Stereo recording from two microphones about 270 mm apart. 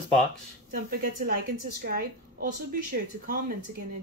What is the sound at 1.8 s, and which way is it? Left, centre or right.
Speech, right.